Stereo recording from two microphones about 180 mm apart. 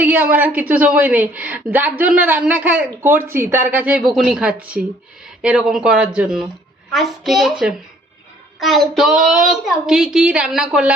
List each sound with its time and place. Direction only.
0.0 s a woman's voice: 10° right (ahead or behind)